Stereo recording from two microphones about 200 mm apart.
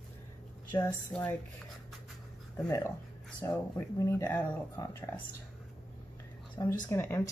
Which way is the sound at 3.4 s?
15° left (ahead or behind).